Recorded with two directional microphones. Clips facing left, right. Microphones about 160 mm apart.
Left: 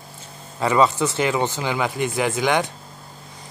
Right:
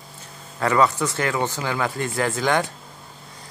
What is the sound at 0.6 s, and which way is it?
Speech, 20° left (ahead or behind).